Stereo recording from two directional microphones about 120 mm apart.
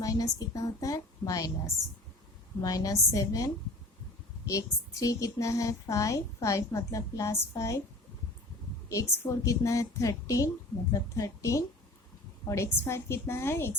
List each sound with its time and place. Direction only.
0.0 s a woman's voice: 30° left (ahead or behind)
8.9 s a woman's voice: 25° left (ahead or behind)